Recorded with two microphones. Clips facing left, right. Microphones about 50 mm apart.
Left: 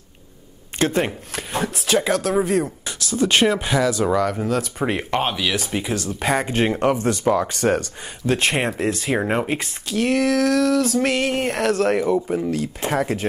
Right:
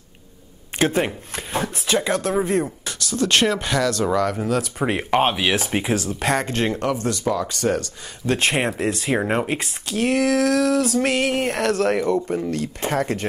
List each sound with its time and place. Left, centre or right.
0.9 s speech: centre
5.2 s speech: right
5.9 s speech: centre
6.5 s speech: centre
7.2 s speech: left
8.3 s speech: centre